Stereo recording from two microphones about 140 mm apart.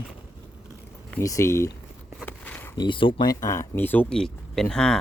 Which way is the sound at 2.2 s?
10° left (ahead or behind).